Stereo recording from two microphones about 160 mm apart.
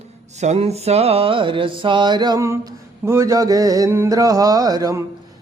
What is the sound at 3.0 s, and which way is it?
Mantra, 15° right (ahead or behind).